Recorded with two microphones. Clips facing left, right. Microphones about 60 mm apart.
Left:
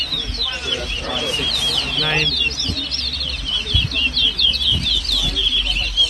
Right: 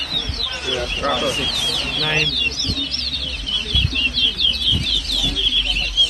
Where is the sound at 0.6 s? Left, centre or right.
Right.